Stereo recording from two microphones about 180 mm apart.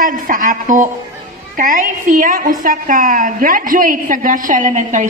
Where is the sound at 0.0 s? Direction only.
45° right (ahead or behind).